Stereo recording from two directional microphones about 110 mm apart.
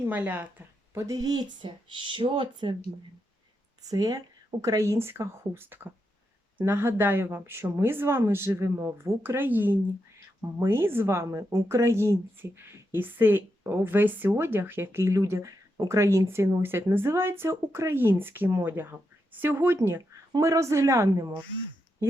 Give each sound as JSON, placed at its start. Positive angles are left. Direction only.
{"t": 0.0, "sound": "speech", "side_deg": -15}
{"t": 1.0, "sound": "speech", "side_deg": -35}
{"t": 3.8, "sound": "speech", "side_deg": -35}